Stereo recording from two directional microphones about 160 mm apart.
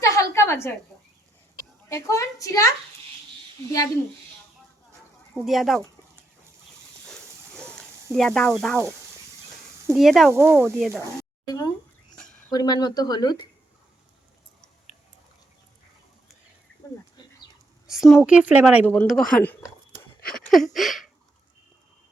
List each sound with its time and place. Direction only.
0.0 s a sound: 20° left (ahead or behind)
1.9 s speech: 20° left (ahead or behind)
5.3 s speech: centre (ahead or behind)
8.1 s speech: 5° left (ahead or behind)
9.9 s speech: centre (ahead or behind)
10.3 s speech: 15° right (ahead or behind)
10.8 s speech: centre (ahead or behind)
11.4 s speech: 25° left (ahead or behind)
17.8 s a sound: centre (ahead or behind)
18.3 s speech: 10° right (ahead or behind)
18.9 s speech: 5° left (ahead or behind)
20.2 s a sound: 5° left (ahead or behind)